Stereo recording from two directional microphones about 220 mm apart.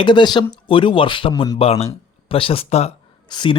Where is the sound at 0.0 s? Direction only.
20° left (ahead or behind).